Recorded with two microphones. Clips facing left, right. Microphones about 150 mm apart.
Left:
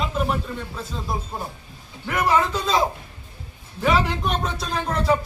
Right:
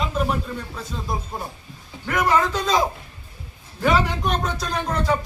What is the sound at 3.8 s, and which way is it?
Speech, 5° left (ahead or behind).